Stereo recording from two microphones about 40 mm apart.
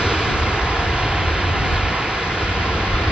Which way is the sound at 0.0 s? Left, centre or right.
Right.